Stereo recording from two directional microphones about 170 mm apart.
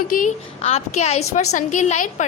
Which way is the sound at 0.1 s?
50° left (ahead or behind).